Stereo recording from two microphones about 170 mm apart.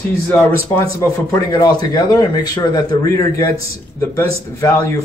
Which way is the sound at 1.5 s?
25° left (ahead or behind).